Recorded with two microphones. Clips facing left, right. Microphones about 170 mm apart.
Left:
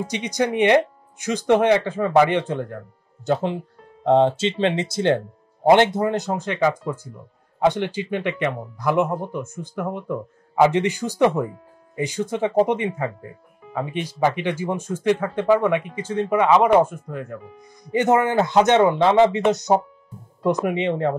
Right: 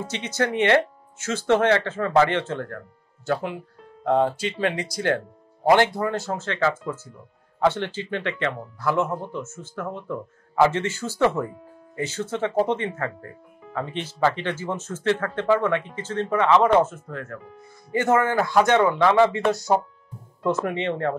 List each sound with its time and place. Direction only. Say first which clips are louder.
0.0 s speech: left 3 dB; 15° left (ahead or behind)